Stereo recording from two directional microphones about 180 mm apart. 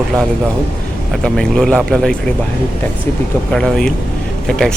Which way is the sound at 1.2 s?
5° left (ahead or behind).